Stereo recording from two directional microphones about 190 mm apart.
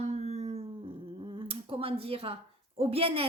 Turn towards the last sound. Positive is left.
turn(degrees=-30)  # may be behind; listen again after turning